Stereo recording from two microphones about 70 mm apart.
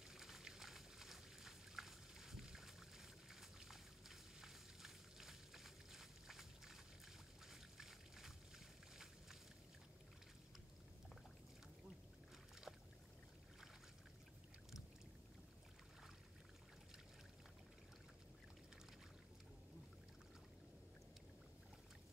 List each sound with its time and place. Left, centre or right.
0.1 s a sound: centre
7.4 s trickle: centre
8.9 s boat: centre
12.7 s boat: centre